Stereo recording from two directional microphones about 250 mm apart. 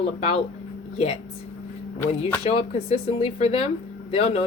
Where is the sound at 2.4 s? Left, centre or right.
Left.